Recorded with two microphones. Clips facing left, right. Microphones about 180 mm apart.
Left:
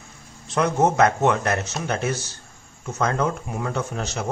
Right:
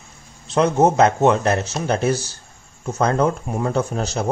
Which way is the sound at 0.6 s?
25° right (ahead or behind).